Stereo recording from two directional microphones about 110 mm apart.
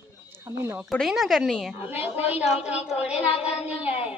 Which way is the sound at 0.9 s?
Centre (ahead or behind).